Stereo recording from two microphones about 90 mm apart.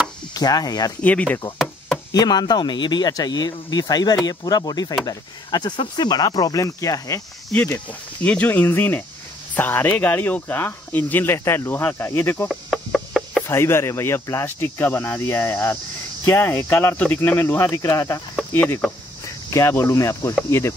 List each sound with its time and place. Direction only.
0.3 s speech: 45° left (ahead or behind)
1.0 s speech: 15° left (ahead or behind)
2.1 s speech: 50° left (ahead or behind)
8.2 s speech: 20° left (ahead or behind)
12.4 s a sound: 5° left (ahead or behind)
13.5 s speech: 30° left (ahead or behind)
18.5 s speech: 20° left (ahead or behind)
19.2 s cricket: 35° left (ahead or behind)
19.8 s speech: 35° left (ahead or behind)